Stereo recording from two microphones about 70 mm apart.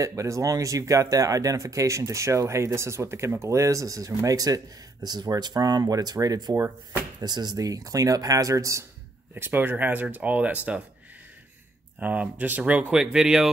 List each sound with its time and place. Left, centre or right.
0.0 s speech: right
5.0 s speech: right
7.2 s speech: right
9.3 s speech: right
12.0 s speech: right